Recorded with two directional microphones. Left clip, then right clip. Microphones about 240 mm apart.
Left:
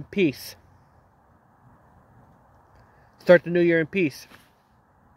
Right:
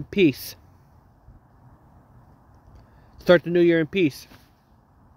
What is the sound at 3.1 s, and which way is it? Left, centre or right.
Speech, centre.